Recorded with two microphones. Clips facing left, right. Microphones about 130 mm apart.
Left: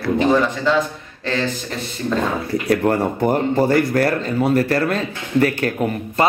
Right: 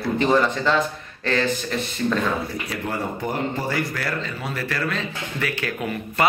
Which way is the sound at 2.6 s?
60° left (ahead or behind).